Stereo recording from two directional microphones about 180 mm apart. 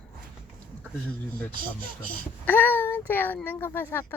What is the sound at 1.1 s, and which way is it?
A woman's voice, 5° left (ahead or behind).